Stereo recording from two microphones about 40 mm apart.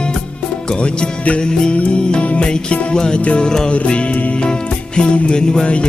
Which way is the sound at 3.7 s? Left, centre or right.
Left.